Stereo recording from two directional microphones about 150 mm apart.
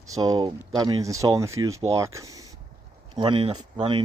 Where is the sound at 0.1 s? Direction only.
25° right (ahead or behind).